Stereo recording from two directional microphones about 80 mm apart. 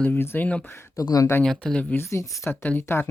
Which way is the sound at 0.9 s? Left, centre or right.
Left.